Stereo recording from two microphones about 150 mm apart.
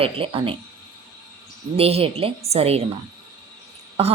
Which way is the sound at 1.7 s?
40° right (ahead or behind).